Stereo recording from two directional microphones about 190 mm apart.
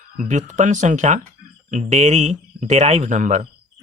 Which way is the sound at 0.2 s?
40° right (ahead or behind).